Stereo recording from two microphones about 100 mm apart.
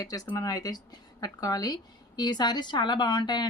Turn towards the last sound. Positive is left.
turn(degrees=45)  # may be behind; listen again after turning